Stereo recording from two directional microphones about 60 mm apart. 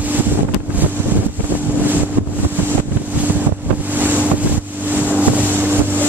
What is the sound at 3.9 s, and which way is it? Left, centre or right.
Boat, right.